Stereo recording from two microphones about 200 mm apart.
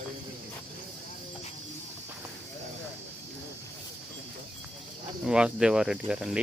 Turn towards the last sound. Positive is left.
turn(degrees=-5)  # may be behind; listen again after turning